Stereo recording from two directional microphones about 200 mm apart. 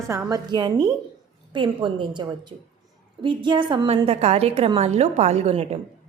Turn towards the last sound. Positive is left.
turn(degrees=-30)  # may be behind; listen again after turning